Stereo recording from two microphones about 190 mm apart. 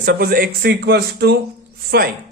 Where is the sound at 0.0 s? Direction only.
50° right (ahead or behind).